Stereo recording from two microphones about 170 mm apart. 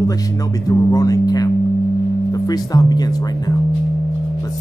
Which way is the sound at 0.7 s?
20° left (ahead or behind).